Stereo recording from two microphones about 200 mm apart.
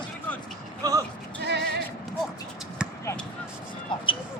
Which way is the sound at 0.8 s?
20° right (ahead or behind).